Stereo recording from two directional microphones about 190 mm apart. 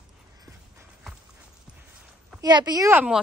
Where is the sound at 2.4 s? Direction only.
20° right (ahead or behind).